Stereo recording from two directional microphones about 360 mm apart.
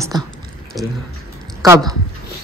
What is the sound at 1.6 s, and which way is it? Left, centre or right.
Speech, centre.